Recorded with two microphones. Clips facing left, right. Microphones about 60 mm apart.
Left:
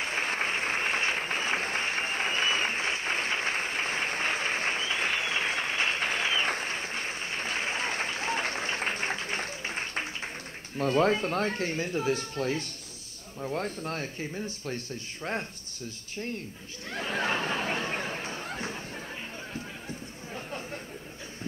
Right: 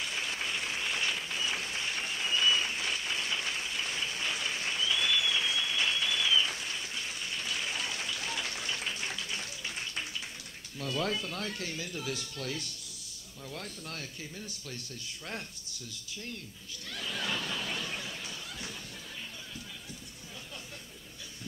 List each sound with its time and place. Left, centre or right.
0.0 s a sound: left
10.8 s speech: left
16.9 s chatter: left